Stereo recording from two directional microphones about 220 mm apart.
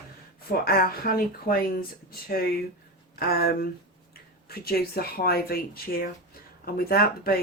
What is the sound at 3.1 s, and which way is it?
Speech, 45° left (ahead or behind).